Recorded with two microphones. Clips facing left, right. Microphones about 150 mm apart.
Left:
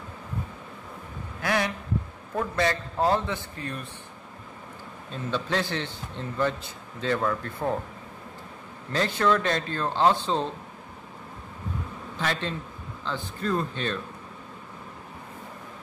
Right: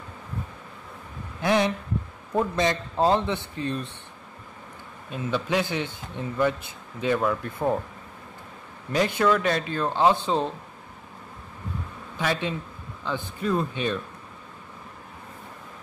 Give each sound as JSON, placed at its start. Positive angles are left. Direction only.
{"t": 1.4, "sound": "a sound", "side_deg": -20}
{"t": 2.3, "sound": "a man's voice", "side_deg": -20}
{"t": 5.1, "sound": "speech", "side_deg": -15}
{"t": 8.9, "sound": "speech", "side_deg": -15}
{"t": 12.2, "sound": "speech", "side_deg": -15}